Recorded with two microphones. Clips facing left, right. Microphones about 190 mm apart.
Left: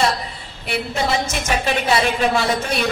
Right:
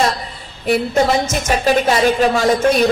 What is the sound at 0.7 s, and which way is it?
A man's voice, 40° right (ahead or behind).